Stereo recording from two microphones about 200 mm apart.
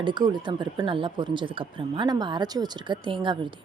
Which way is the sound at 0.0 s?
20° right (ahead or behind).